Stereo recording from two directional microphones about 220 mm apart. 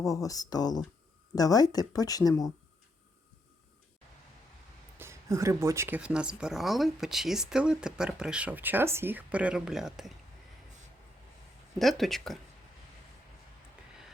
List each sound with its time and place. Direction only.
0.1 s speech: 15° left (ahead or behind)
4.9 s speech: 10° right (ahead or behind)
11.8 s speech: centre (ahead or behind)